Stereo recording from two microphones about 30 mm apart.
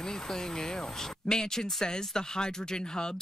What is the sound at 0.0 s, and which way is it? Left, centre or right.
Speech, centre.